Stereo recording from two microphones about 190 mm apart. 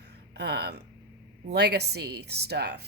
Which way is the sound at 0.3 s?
60° right (ahead or behind).